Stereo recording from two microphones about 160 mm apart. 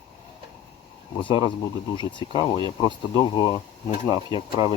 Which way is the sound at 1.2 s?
35° left (ahead or behind).